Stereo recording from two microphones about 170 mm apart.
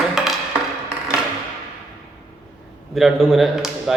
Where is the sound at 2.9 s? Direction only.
Centre (ahead or behind).